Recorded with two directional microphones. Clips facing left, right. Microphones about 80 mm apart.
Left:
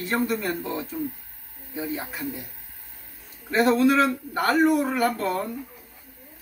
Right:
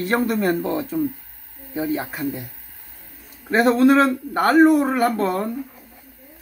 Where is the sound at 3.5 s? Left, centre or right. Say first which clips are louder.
Right 4 dB; right.